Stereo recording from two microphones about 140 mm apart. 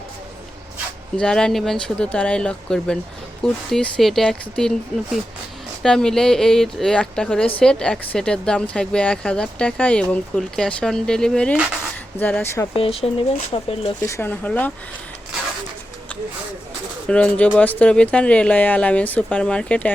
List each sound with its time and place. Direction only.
1.1 s speech: 5° left (ahead or behind)
5.8 s speech: 5° left (ahead or behind)
12.7 s speech: 40° left (ahead or behind)
14.0 s speech: 20° left (ahead or behind)
17.1 s speech: 10° left (ahead or behind)